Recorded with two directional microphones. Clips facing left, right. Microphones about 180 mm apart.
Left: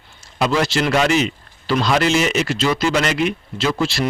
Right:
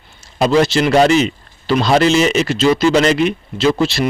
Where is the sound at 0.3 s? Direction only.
30° right (ahead or behind).